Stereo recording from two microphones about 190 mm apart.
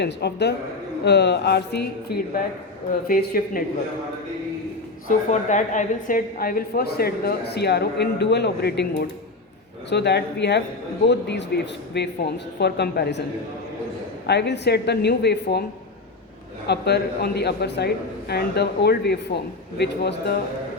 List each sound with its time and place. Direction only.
0.0 s a woman's voice: 60° left (ahead or behind)
5.0 s a woman's voice: 40° left (ahead or behind); by 13.2 s 65° left (ahead or behind)
14.3 s a woman's voice: 65° left (ahead or behind)
16.6 s a woman's voice: 60° left (ahead or behind)